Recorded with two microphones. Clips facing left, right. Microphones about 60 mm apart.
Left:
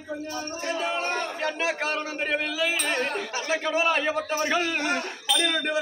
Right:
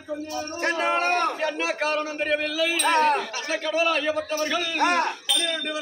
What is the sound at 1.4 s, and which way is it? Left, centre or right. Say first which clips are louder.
A man's voice: right 2 dB; centre.